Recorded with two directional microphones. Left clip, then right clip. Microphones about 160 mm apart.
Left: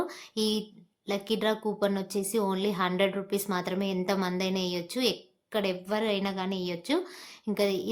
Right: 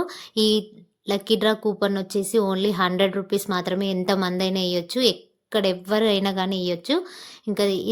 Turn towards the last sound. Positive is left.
turn(degrees=-30)  # may be behind; listen again after turning